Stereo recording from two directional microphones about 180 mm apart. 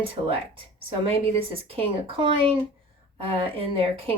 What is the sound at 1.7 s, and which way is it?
Speech, 30° right (ahead or behind).